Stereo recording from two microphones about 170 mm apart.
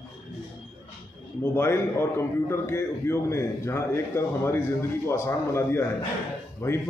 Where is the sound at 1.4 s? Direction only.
15° left (ahead or behind).